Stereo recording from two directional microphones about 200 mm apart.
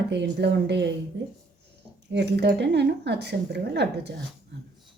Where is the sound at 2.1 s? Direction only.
60° right (ahead or behind).